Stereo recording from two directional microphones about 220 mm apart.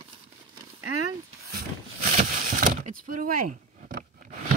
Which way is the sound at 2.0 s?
40° right (ahead or behind).